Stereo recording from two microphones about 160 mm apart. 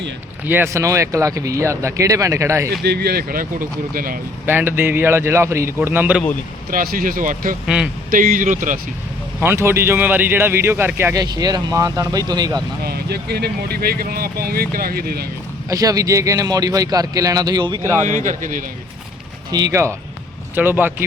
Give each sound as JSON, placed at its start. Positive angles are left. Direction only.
{"t": 0.4, "sound": "speech", "side_deg": -15}
{"t": 2.8, "sound": "speech", "side_deg": -80}
{"t": 4.4, "sound": "speech", "side_deg": -15}
{"t": 6.7, "sound": "speech", "side_deg": -60}
{"t": 9.4, "sound": "speech", "side_deg": -15}
{"t": 12.8, "sound": "speech", "side_deg": -80}
{"t": 15.7, "sound": "speech", "side_deg": -20}
{"t": 18.1, "sound": "speech", "side_deg": -55}
{"t": 19.5, "sound": "speech", "side_deg": -25}